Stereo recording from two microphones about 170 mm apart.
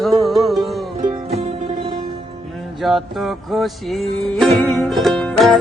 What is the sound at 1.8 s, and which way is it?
Music, 30° right (ahead or behind).